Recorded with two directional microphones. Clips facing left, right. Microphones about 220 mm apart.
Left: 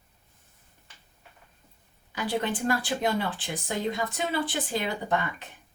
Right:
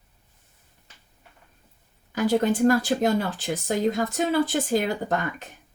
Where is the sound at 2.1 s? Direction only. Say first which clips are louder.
Right 8 dB; 45° right (ahead or behind).